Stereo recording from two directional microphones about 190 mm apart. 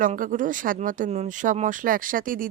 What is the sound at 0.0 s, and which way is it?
Speech, 45° right (ahead or behind).